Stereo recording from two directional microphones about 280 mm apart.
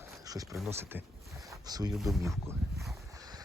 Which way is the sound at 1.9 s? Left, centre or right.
Centre.